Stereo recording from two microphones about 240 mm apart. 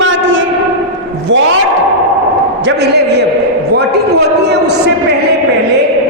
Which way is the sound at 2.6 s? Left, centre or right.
Right.